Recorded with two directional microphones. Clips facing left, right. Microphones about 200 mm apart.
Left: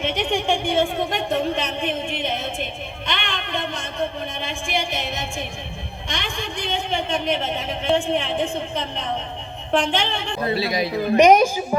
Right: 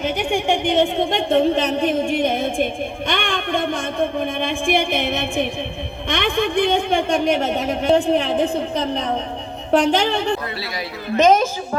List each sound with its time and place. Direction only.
0.0 s a woman's voice: 10° right (ahead or behind); by 2.6 s 50° right (ahead or behind)
3.1 s a sound: 50° right (ahead or behind)
4.4 s a woman's voice: 55° right (ahead or behind)
10.5 s a woman's voice: 20° left (ahead or behind)